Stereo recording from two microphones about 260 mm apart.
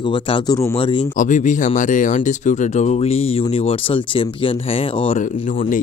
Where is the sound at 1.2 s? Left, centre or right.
Left.